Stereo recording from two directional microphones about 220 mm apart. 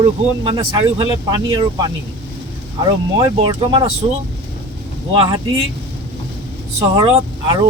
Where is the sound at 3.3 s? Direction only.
25° right (ahead or behind).